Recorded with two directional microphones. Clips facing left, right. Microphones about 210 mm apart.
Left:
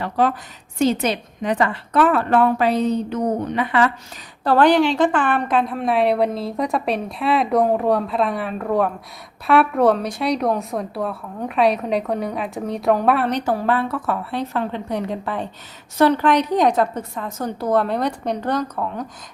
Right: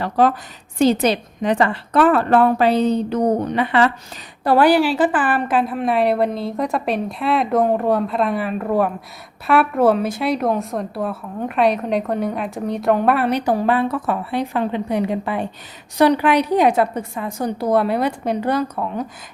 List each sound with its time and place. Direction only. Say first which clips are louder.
0.0 s a woman's voice: right 3 dB; 40° right (ahead or behind)
4.4 s a woman's voice: right 1 dB; 10° right (ahead or behind)